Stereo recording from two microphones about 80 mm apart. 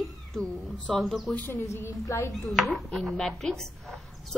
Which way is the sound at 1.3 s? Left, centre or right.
Left.